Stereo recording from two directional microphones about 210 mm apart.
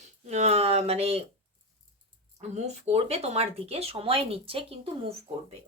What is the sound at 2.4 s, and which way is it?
A woman's voice, 30° right (ahead or behind).